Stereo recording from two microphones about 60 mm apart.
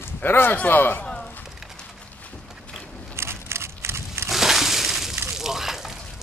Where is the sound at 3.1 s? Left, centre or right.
Right.